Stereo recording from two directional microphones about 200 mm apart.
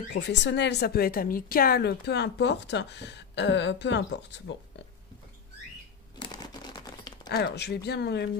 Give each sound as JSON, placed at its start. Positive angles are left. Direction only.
{"t": 0.1, "sound": "speech", "side_deg": 60}
{"t": 6.3, "sound": "a sound", "side_deg": 20}
{"t": 7.2, "sound": "speech", "side_deg": 55}